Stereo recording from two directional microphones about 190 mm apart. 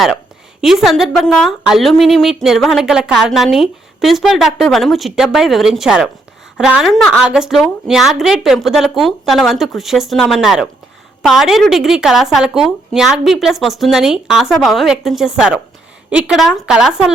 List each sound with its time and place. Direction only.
0.6 s a woman's voice: centre (ahead or behind)